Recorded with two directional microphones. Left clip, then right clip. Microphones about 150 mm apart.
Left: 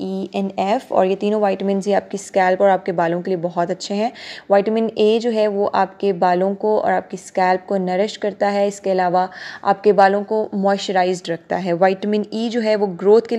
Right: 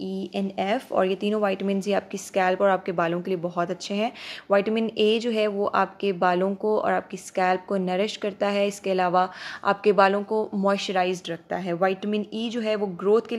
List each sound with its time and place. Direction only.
0.0 s speech: 20° left (ahead or behind)